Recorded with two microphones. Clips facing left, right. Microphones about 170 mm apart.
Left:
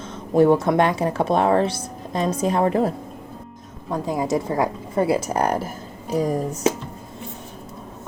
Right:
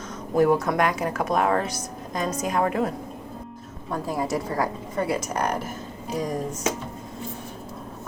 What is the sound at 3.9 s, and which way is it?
Speech, 20° left (ahead or behind).